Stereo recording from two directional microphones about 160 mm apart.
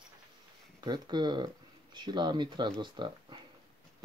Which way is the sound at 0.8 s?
25° right (ahead or behind).